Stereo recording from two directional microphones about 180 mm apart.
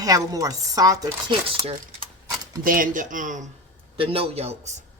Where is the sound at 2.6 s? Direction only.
50° right (ahead or behind).